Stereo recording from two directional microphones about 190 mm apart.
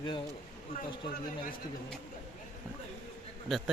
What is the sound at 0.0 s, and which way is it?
Speech, 25° left (ahead or behind).